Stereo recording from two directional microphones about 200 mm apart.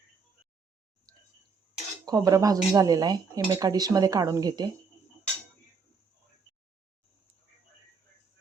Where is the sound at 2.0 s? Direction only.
15° right (ahead or behind).